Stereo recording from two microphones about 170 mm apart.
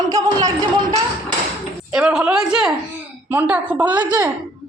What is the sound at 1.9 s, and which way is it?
A woman's voice, 5° right (ahead or behind).